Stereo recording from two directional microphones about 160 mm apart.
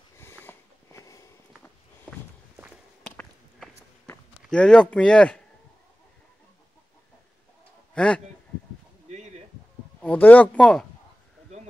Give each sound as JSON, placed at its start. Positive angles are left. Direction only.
{"t": 0.2, "sound": "sniff", "side_deg": 15}
{"t": 3.2, "sound": "walk", "side_deg": 0}
{"t": 4.4, "sound": "speech", "side_deg": 5}
{"t": 7.9, "sound": "a sound", "side_deg": 5}
{"t": 10.0, "sound": "speech", "side_deg": 10}